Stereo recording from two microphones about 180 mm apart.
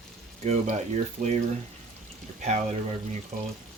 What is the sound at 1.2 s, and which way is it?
Speech, 50° right (ahead or behind).